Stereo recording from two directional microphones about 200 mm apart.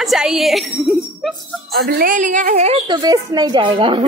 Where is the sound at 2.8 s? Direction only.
20° right (ahead or behind).